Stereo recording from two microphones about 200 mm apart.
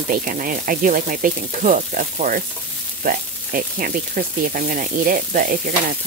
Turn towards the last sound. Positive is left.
turn(degrees=-45)  # may be behind; listen again after turning